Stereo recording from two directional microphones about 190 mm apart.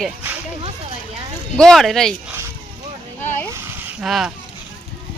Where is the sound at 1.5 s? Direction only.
5° left (ahead or behind).